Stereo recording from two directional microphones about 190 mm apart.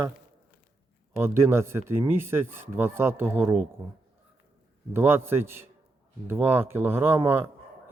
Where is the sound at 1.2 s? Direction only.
15° right (ahead or behind).